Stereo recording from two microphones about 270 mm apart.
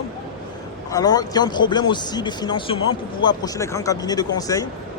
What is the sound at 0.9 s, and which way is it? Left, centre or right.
Speech, centre.